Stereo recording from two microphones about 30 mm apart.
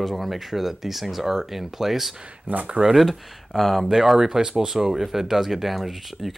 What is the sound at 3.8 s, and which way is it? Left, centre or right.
Speech, centre.